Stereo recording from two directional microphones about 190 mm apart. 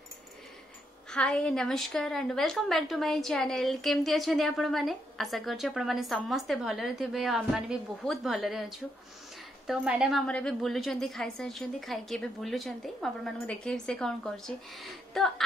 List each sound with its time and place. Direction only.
1.1 s a woman's voice: 5° left (ahead or behind)